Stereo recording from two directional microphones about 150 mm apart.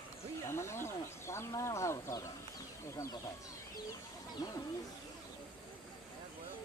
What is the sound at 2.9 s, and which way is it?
Speech, 20° left (ahead or behind).